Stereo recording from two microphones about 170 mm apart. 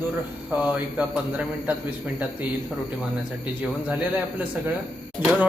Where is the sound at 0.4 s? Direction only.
10° right (ahead or behind).